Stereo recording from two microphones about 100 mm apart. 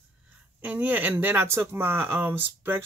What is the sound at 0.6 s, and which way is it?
A man's voice, 15° right (ahead or behind).